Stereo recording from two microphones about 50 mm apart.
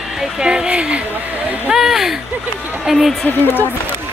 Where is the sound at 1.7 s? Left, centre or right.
Centre.